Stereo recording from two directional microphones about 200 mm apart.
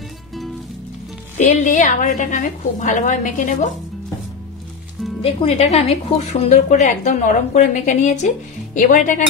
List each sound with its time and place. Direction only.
1.4 s a woman's voice: 40° left (ahead or behind)
5.2 s a woman's voice: 30° left (ahead or behind)